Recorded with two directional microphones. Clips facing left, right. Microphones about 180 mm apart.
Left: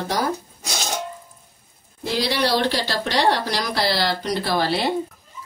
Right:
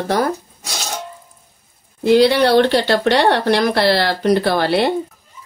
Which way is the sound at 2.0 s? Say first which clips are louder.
Right 11 dB; 60° right (ahead or behind).